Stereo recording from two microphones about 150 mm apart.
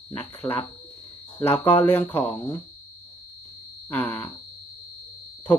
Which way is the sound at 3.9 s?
15° left (ahead or behind).